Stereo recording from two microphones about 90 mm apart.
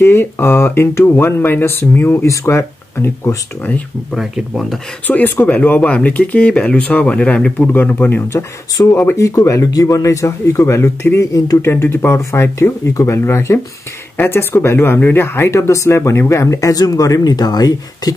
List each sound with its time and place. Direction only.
0.0 s speech: 25° left (ahead or behind)
4.1 s speech: centre (ahead or behind)
5.0 s speech: 20° left (ahead or behind)
8.3 s speech: 35° left (ahead or behind)
11.3 s speech: 40° left (ahead or behind)
11.7 s speech: 25° left (ahead or behind); by 18.1 s 45° left (ahead or behind)